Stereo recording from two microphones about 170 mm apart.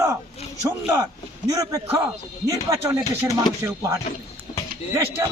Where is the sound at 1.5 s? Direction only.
20° right (ahead or behind).